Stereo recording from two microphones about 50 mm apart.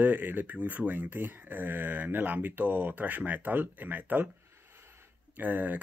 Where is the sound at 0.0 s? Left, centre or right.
Right.